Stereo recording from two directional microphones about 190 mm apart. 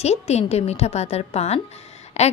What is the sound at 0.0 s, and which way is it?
A woman's voice, 35° left (ahead or behind).